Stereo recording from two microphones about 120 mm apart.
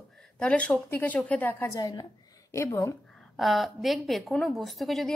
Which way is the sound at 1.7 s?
35° left (ahead or behind).